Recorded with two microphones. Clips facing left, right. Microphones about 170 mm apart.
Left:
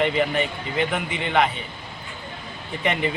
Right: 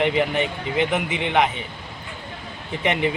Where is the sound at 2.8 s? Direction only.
15° right (ahead or behind).